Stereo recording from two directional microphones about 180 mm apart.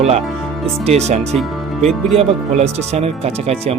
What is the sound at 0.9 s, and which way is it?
Speech, 35° right (ahead or behind).